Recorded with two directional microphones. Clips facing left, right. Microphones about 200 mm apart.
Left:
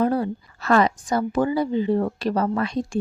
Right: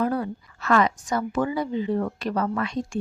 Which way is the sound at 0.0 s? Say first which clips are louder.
Left 4 dB; 30° left (ahead or behind).